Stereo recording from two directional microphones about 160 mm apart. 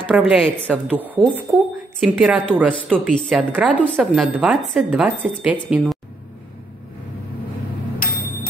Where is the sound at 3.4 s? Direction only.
10° right (ahead or behind).